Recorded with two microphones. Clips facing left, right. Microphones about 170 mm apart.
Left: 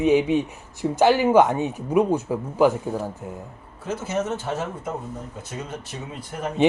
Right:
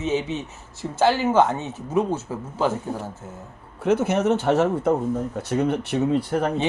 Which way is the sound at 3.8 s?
65° right (ahead or behind).